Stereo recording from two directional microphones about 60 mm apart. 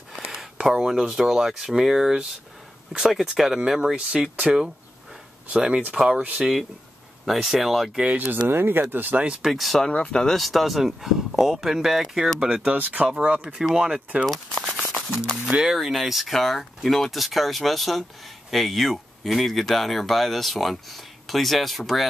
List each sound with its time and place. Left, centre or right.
0.3 s speech: centre; by 6.5 s right
7.2 s speech: centre
8.5 s speech: right
9.4 s speech: centre
9.8 s speech: centre
10.3 s speech: centre
12.7 s speech: right
14.2 s speech: centre
15.2 s speech: centre